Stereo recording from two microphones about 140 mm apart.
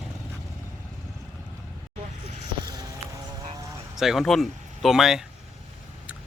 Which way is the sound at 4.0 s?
Centre (ahead or behind).